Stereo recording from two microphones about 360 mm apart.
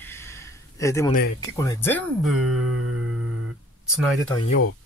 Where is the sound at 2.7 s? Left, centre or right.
Right.